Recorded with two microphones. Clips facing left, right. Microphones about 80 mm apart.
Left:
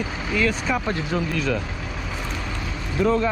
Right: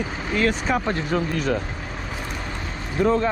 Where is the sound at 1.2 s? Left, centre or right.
Right.